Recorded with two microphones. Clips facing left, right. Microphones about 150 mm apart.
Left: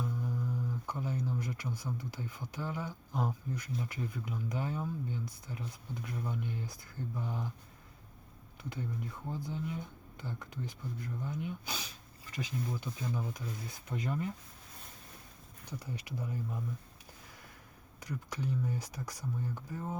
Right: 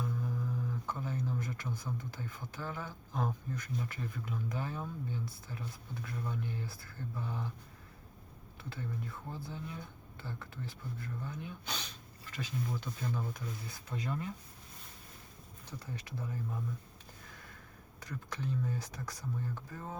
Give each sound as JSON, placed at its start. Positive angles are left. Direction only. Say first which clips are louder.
{"t": 0.9, "sound": "speech", "louder": "left 2 dB", "side_deg": 15}
{"t": 8.7, "sound": "speech", "louder": "left 1 dB", "side_deg": 20}
{"t": 15.8, "sound": "speech", "louder": "left 1 dB", "side_deg": 15}
{"t": 18.0, "sound": "speech", "louder": "left 2 dB", "side_deg": 15}